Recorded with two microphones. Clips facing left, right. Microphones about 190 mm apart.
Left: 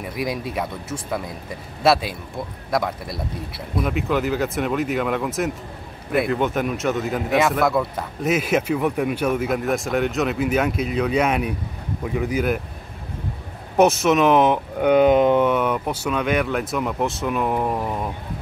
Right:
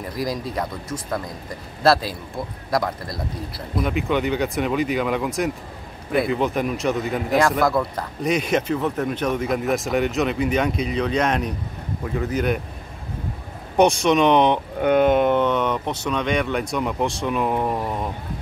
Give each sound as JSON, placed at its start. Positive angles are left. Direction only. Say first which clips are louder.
{"t": 0.0, "sound": "speech", "louder": "even", "side_deg": 5}
{"t": 2.7, "sound": "speech", "louder": "even", "side_deg": 0}
{"t": 13.7, "sound": "speech", "louder": "even", "side_deg": 5}